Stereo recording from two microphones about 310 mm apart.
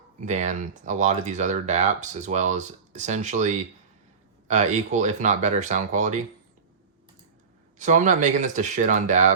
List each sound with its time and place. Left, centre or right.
0.3 s speech: right
7.8 s speech: right